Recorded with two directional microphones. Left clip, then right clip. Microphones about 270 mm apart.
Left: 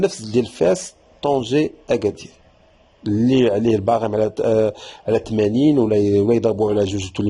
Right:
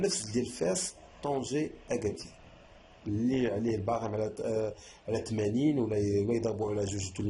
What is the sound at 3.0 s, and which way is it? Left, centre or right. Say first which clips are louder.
A man's voice: left 14 dB; left.